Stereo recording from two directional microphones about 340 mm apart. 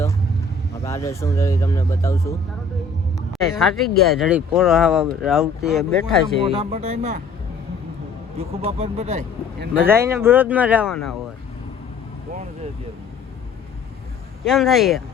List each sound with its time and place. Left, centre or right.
0.9 s speech: centre
3.3 s speech: centre
6.4 s speech: centre
8.4 s speech: centre
9.8 s speech: centre
14.4 s speech: centre